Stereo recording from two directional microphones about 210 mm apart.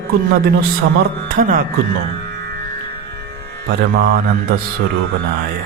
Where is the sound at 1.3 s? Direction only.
40° right (ahead or behind).